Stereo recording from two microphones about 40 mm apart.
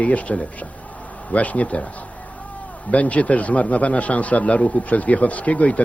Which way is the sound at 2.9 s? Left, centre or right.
Left.